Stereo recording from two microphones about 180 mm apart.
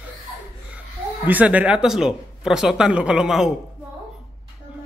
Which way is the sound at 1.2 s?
10° right (ahead or behind).